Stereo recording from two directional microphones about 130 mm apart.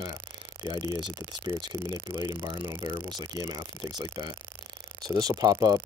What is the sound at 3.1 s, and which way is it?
Speech, 30° right (ahead or behind).